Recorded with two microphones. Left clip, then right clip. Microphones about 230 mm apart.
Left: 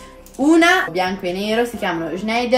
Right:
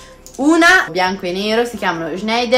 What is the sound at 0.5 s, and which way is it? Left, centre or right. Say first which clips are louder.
A woman's voice: right 3 dB; centre.